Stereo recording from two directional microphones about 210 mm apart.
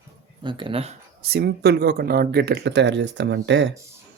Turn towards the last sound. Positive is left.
turn(degrees=-60)  # may be behind; listen again after turning